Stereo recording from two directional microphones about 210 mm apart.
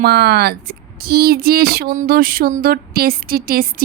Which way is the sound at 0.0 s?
50° right (ahead or behind).